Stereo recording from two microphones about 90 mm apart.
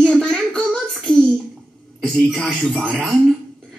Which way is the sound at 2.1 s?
5° left (ahead or behind).